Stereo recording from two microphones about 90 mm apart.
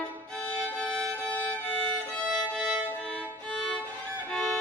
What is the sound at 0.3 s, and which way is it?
Violin, 10° left (ahead or behind).